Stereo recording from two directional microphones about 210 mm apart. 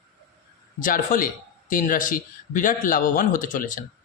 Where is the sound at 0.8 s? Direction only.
40° left (ahead or behind).